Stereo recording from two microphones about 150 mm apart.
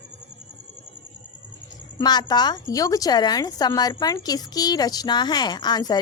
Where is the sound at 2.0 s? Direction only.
30° left (ahead or behind).